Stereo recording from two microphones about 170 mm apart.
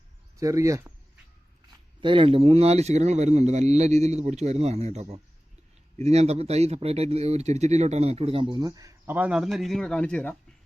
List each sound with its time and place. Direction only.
0.3 s speech: 20° right (ahead or behind)
2.0 s speech: 30° right (ahead or behind); by 10.3 s 10° left (ahead or behind)